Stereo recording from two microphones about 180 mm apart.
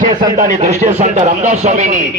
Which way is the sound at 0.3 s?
40° right (ahead or behind).